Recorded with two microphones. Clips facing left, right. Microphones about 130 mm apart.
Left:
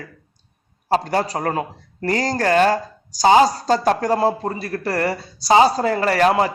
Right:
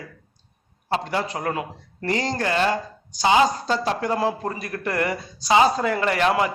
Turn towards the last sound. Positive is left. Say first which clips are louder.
# left 4 dB
turn(degrees=35)  # may be behind; listen again after turning